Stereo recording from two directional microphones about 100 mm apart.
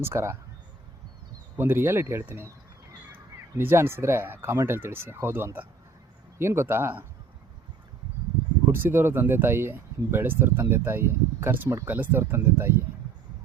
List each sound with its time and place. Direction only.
0.0 s speech: 25° right (ahead or behind)
1.5 s speech: 25° right (ahead or behind)
3.5 s speech: 25° right (ahead or behind)
8.7 s speech: 20° right (ahead or behind)